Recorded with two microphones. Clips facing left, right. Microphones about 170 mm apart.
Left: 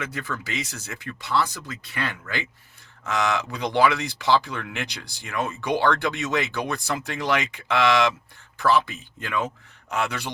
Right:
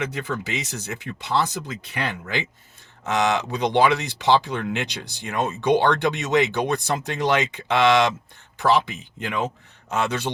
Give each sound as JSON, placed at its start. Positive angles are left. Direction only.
{"t": 0.1, "sound": "speech", "side_deg": -20}